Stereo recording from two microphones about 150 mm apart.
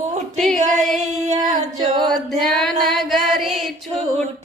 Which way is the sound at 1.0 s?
50° right (ahead or behind).